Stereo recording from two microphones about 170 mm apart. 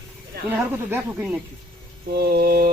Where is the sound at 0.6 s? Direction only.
10° right (ahead or behind).